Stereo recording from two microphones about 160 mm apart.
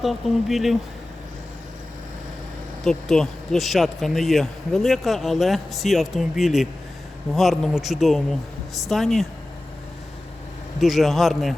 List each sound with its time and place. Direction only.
0.0 s speech: centre (ahead or behind)
2.8 s speech: 5° left (ahead or behind)
10.8 s speech: centre (ahead or behind)